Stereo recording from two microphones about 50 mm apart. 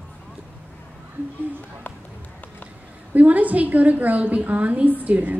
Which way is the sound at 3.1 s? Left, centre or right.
Right.